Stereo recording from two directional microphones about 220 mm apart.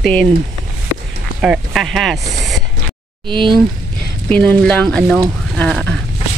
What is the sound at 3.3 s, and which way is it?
Speech, 20° right (ahead or behind).